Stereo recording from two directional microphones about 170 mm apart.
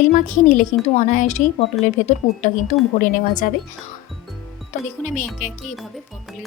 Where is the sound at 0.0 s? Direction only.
50° left (ahead or behind).